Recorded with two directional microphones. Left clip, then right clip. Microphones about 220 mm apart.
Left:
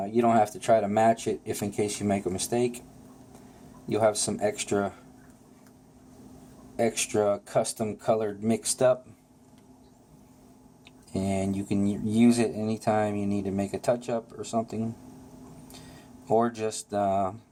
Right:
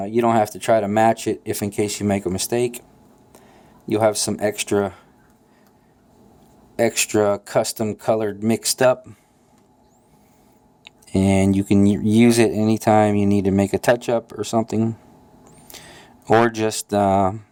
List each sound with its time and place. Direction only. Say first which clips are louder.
0.0 s speech: right 5 dB; 45° right (ahead or behind)
3.8 s speech: right 6 dB; 40° right (ahead or behind)
6.7 s speech: right 7 dB; 40° right (ahead or behind)
10.8 s speech: right 11 dB; 50° right (ahead or behind)
16.2 s speech: right 9 dB; 50° right (ahead or behind)